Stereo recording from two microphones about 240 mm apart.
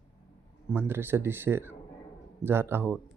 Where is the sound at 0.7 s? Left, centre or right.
Centre.